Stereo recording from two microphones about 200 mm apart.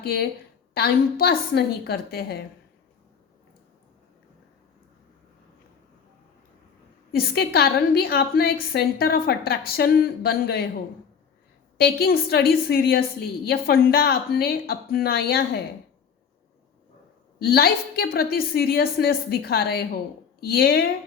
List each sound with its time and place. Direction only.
0.0 s a woman's voice: 50° left (ahead or behind)
7.1 s a woman's voice: 50° left (ahead or behind)
11.8 s a woman's voice: 50° left (ahead or behind)
17.4 s a woman's voice: 50° left (ahead or behind)